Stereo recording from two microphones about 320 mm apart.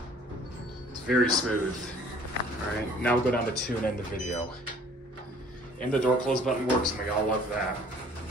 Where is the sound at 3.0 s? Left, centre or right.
Centre.